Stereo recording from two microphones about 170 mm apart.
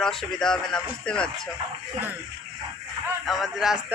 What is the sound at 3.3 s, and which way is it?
Speech, centre (ahead or behind).